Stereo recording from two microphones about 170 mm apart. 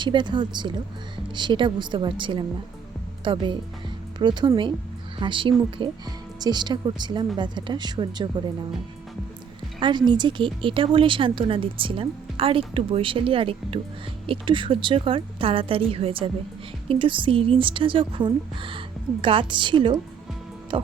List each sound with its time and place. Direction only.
0.0 s a woman's voice: 25° right (ahead or behind)
9.8 s a woman's voice: 25° right (ahead or behind)